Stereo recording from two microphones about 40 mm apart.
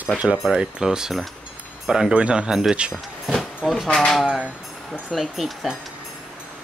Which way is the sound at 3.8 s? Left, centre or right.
Centre.